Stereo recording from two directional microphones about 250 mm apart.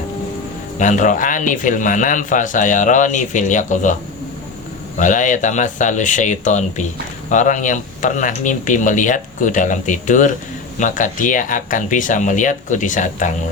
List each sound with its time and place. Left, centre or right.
0.8 s a man's voice: left
4.9 s a man's voice: left